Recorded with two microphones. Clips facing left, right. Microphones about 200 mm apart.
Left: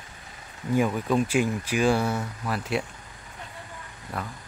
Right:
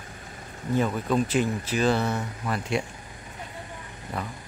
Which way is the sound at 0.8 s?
10° left (ahead or behind).